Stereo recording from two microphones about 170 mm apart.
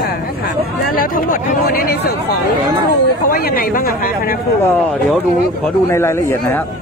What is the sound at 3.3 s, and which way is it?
Speech, 55° left (ahead or behind).